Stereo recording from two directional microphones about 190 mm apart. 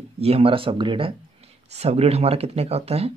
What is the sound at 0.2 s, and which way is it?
Speech, 30° right (ahead or behind).